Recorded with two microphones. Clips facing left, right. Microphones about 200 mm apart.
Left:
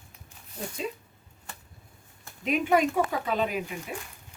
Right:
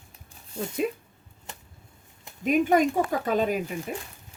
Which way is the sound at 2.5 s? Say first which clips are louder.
Right 3 dB; 45° right (ahead or behind).